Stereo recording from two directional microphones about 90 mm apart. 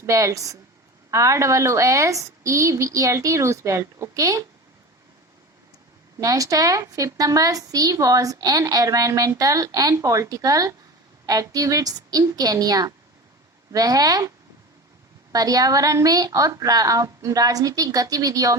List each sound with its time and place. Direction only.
0.0 s a woman's voice: 35° right (ahead or behind)
6.1 s a woman's voice: 40° right (ahead or behind)